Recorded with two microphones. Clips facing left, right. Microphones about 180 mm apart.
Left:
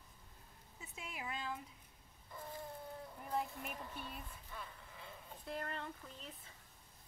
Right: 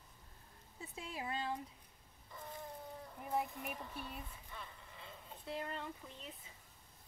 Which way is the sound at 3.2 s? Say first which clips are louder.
Right 2 dB; 15° right (ahead or behind).